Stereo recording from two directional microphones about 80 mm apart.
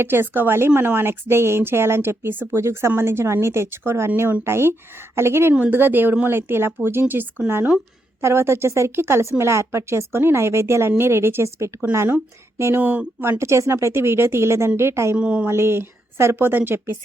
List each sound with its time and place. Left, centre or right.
0.0 s a woman's voice: right
12.8 s speech: centre
13.4 s a woman's voice: right
15.1 s a woman's voice: centre
15.4 s a woman's voice: right